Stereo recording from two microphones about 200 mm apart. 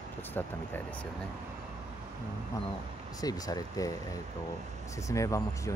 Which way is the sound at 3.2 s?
20° left (ahead or behind).